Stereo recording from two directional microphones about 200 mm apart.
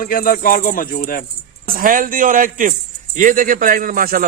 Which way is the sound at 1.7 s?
45° right (ahead or behind).